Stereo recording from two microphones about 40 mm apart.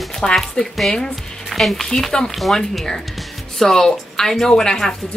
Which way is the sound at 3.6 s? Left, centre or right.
Centre.